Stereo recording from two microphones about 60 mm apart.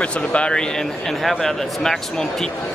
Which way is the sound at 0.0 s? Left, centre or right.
Centre.